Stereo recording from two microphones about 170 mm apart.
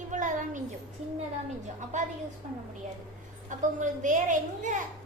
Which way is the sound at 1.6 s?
45° right (ahead or behind).